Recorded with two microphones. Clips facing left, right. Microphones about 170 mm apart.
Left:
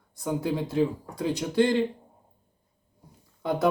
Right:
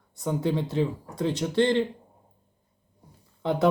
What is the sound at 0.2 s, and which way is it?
Speech, 5° left (ahead or behind).